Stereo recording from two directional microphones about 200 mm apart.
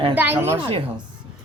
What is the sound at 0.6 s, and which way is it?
Speech, 25° right (ahead or behind).